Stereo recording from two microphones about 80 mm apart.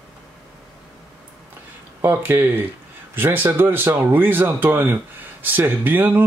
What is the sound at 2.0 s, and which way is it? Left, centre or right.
Speech, right.